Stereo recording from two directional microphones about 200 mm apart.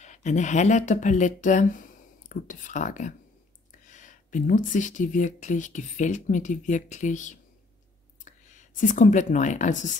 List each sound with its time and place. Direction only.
0.0 s speech: 35° left (ahead or behind)